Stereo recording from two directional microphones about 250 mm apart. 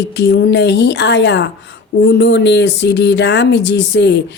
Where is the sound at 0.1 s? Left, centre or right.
Left.